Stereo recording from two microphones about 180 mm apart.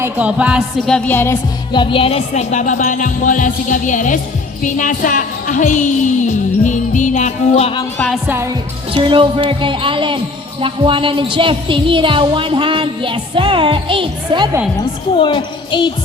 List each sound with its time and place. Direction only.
0.0 s music: 5° right (ahead or behind); by 1.4 s 10° left (ahead or behind)
1.7 s music: 25° left (ahead or behind)
8.9 s speech: 30° right (ahead or behind)
15.1 s speech: 25° left (ahead or behind)